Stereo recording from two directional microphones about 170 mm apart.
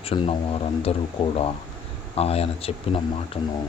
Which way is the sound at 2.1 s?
35° left (ahead or behind).